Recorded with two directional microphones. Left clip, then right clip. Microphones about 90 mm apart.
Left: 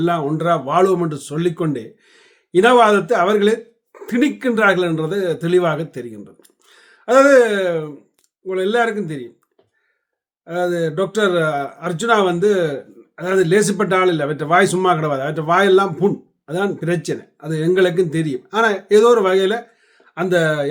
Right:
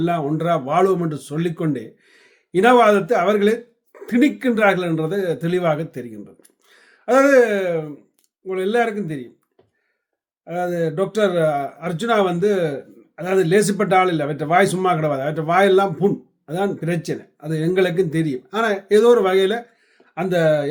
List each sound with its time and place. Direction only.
0.0 s speech: 35° left (ahead or behind)
10.4 s speech: 30° left (ahead or behind)